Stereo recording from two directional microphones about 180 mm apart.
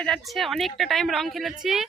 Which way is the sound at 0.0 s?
Centre (ahead or behind).